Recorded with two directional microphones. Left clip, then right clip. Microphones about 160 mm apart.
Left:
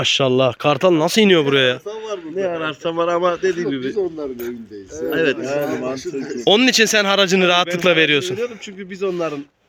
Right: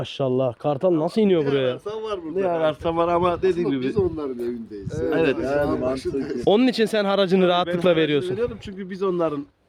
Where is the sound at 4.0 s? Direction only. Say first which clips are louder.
Left 1 dB; 10° right (ahead or behind).